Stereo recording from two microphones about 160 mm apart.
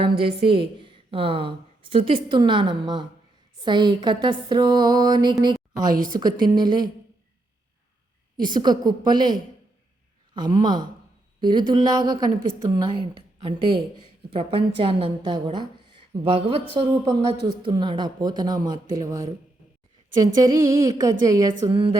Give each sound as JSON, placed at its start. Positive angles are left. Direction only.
{"t": 0.0, "sound": "a woman's voice", "side_deg": -35}
{"t": 8.4, "sound": "a woman's voice", "side_deg": -25}
{"t": 21.7, "sound": "a woman's voice", "side_deg": -30}